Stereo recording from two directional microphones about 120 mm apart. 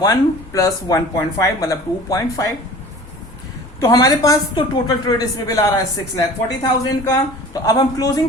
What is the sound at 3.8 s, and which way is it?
A woman's voice, 30° left (ahead or behind).